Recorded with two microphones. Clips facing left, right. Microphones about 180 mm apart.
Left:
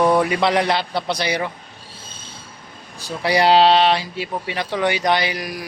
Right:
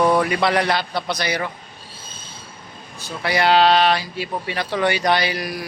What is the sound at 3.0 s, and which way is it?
Speech, 35° left (ahead or behind).